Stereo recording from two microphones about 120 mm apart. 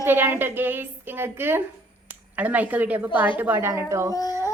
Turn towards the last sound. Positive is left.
turn(degrees=30)  # may be behind; listen again after turning